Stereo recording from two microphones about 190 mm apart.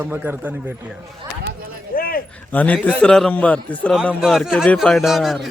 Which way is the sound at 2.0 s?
50° left (ahead or behind).